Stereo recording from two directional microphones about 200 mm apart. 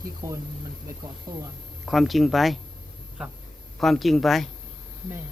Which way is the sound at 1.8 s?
Centre (ahead or behind).